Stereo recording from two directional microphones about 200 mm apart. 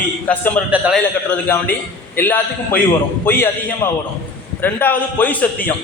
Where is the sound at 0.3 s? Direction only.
5° left (ahead or behind).